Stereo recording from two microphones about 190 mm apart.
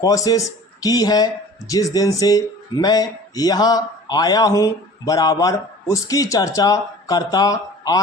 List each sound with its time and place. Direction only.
0.0 s speech: 20° left (ahead or behind)